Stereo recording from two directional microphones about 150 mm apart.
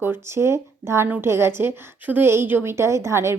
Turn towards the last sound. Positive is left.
turn(degrees=-20)  # may be behind; listen again after turning